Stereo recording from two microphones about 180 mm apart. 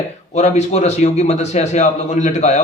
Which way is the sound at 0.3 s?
40° left (ahead or behind).